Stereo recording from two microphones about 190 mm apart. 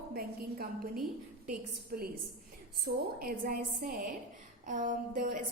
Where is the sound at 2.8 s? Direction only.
50° right (ahead or behind).